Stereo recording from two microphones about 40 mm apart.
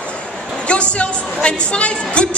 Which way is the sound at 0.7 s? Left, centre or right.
Left.